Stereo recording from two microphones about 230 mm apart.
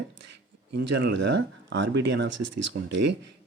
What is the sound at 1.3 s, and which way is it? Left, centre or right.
Speech, right.